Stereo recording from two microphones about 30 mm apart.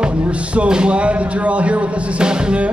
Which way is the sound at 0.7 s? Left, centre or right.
Right.